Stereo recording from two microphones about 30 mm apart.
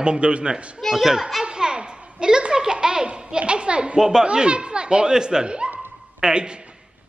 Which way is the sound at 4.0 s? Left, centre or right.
Centre.